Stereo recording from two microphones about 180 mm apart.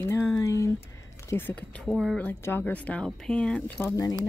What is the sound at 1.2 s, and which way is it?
Speech, 10° left (ahead or behind).